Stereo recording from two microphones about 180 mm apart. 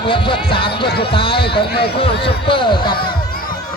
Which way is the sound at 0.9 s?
60° left (ahead or behind).